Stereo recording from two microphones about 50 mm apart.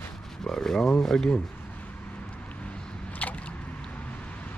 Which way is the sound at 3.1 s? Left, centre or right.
Left.